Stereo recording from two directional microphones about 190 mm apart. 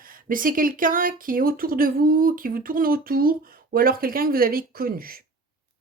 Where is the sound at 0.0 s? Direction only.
45° right (ahead or behind).